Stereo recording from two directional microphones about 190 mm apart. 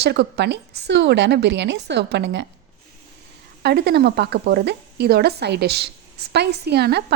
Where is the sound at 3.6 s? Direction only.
60° right (ahead or behind).